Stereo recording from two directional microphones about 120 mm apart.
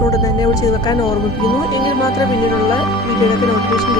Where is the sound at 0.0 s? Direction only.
30° left (ahead or behind).